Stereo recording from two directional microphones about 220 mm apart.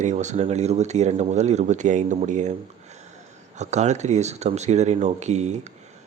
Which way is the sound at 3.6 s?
30° right (ahead or behind).